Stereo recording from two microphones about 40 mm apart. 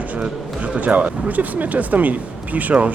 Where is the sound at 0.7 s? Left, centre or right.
Right.